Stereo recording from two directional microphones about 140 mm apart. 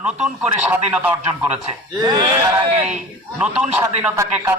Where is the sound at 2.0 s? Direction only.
30° right (ahead or behind).